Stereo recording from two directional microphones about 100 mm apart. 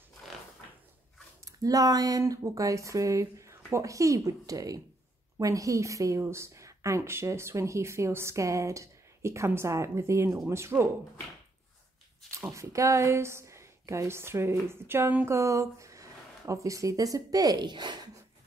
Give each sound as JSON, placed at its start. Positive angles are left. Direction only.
{"t": 1.4, "sound": "speech", "side_deg": -35}
{"t": 12.3, "sound": "a woman's voice", "side_deg": -30}